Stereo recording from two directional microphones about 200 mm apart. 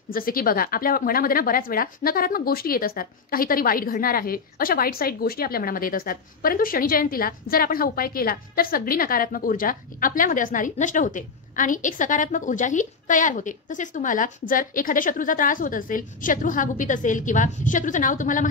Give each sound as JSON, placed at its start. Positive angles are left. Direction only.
{"t": 0.1, "sound": "a woman's voice", "side_deg": 45}